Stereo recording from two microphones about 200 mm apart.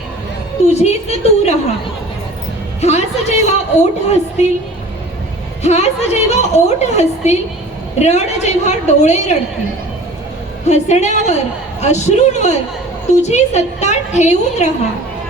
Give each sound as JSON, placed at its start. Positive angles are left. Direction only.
{"t": 0.7, "sound": "a woman's voice", "side_deg": 35}
{"t": 2.8, "sound": "a woman's voice", "side_deg": 35}
{"t": 5.6, "sound": "a woman's voice", "side_deg": 35}
{"t": 10.7, "sound": "a woman's voice", "side_deg": 35}